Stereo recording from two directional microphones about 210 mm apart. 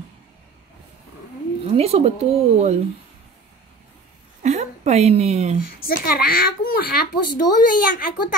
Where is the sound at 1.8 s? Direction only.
30° right (ahead or behind).